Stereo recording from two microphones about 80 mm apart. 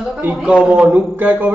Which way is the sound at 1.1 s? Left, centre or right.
Centre.